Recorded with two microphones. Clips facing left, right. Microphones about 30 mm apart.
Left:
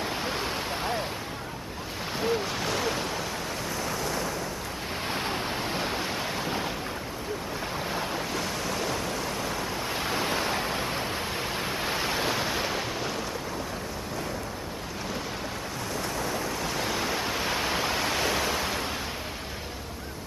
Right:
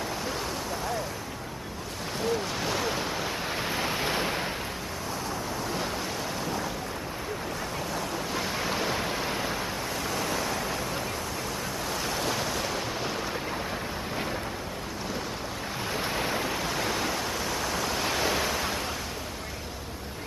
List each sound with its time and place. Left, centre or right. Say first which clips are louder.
0.2 s a sound: left 2 dB; left
2.1 s a sound: left 1 dB; centre
2.6 s waves: even; centre
3.6 s waves: right 3 dB; right
5.8 s waves: left 2 dB; left
8.3 s waves: right 1 dB; centre
9.9 s waves: left 2 dB; left; by 12.9 s centre
15.9 s waves: right 2 dB; right
16.4 s waves: right 1 dB; centre
16.7 s waves: even; centre
17.1 s pink noise: left 1 dB; centre
17.4 s waves: left 2 dB; left
18.0 s waves: even; centre